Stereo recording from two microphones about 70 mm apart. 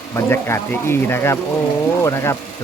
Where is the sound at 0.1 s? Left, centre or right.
Left.